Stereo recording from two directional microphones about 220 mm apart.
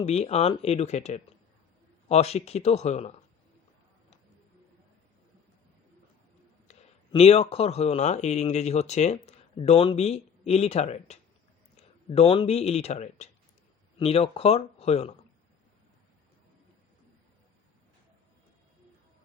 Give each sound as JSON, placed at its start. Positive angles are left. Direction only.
{"t": 0.0, "sound": "speech", "side_deg": 30}
{"t": 6.7, "sound": "speech", "side_deg": 25}